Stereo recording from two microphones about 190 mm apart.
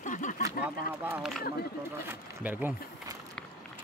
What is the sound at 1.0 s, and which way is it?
A man's voice, 5° right (ahead or behind).